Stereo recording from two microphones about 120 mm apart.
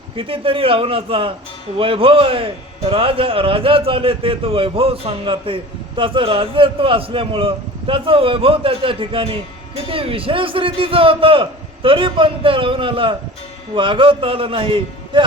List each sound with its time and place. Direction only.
0.2 s a man's voice: 50° right (ahead or behind)